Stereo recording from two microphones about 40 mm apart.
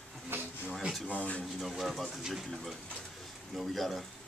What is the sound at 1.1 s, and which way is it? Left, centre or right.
Speech, left.